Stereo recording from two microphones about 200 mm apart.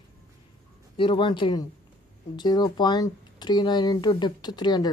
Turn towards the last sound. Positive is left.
turn(degrees=20)  # may be behind; listen again after turning